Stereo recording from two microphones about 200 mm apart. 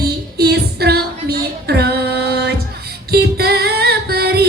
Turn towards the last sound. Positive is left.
turn(degrees=-50)  # may be behind; listen again after turning